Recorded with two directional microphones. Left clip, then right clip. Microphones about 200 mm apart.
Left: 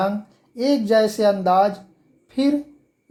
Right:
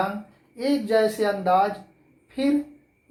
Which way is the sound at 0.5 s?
65° left (ahead or behind).